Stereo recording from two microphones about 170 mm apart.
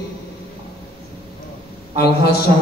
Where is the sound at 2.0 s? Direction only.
65° left (ahead or behind).